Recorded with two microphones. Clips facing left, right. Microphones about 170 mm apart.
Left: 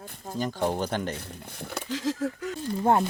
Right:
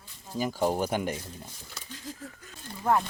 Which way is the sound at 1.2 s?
65° left (ahead or behind).